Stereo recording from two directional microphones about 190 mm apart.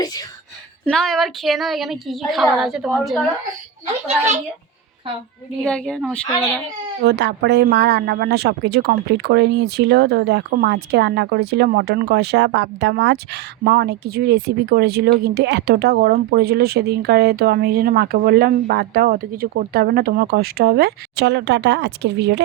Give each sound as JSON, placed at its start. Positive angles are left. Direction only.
{"t": 0.0, "sound": "a sound", "side_deg": 20}
{"t": 0.9, "sound": "a woman's voice", "side_deg": 5}
{"t": 5.6, "sound": "a woman's voice", "side_deg": 5}
{"t": 7.0, "sound": "speech", "side_deg": -65}